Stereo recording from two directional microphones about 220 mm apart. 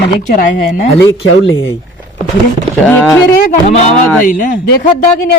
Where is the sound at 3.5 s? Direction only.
30° left (ahead or behind).